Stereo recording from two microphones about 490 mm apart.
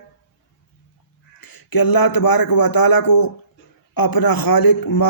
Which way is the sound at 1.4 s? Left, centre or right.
Left.